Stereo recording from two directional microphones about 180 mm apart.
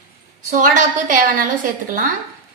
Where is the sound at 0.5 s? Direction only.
45° right (ahead or behind).